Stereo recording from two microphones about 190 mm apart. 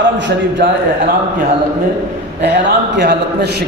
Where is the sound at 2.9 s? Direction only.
65° right (ahead or behind).